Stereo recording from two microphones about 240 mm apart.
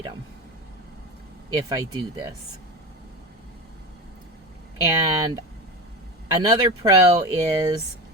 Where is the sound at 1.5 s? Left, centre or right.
Centre.